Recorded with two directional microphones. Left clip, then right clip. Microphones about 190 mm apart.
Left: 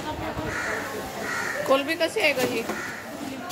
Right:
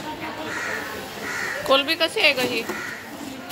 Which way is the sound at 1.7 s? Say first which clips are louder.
Right 4 dB; centre (ahead or behind).